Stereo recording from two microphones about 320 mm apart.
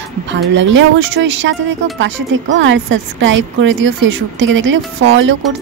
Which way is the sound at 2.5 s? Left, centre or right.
Right.